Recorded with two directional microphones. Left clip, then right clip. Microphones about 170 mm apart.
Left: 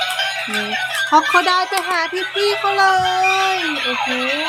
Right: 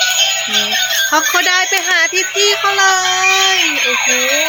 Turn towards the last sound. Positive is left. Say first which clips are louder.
# right 5 dB
turn(degrees=0)  # may be behind; listen again after turning